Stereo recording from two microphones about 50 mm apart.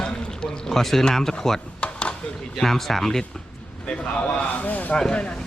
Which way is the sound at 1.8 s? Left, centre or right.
Left.